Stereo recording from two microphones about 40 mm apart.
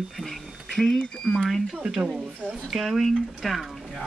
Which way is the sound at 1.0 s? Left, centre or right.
Centre.